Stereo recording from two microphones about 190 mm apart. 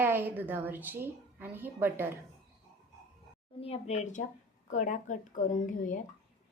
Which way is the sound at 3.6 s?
35° left (ahead or behind).